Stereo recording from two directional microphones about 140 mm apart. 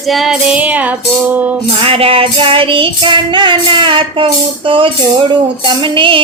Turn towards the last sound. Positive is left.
turn(degrees=-35)  # may be behind; listen again after turning